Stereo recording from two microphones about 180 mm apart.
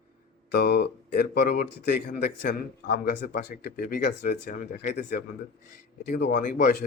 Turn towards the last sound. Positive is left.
turn(degrees=45)  # may be behind; listen again after turning